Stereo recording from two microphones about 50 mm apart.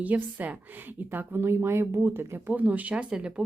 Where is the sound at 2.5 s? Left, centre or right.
Right; by 3.3 s centre.